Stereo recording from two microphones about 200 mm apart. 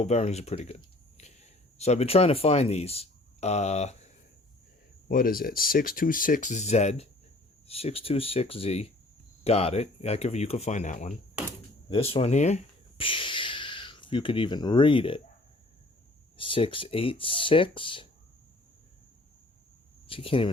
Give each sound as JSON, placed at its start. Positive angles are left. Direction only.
{"t": 0.0, "sound": "speech", "side_deg": 35}
{"t": 5.0, "sound": "speech", "side_deg": 45}
{"t": 16.4, "sound": "speech", "side_deg": 25}
{"t": 20.1, "sound": "speech", "side_deg": 25}